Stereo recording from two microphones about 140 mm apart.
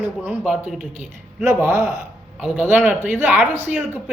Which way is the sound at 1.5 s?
20° right (ahead or behind).